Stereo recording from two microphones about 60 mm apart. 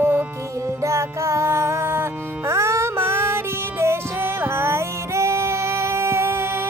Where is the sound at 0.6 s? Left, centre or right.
Right.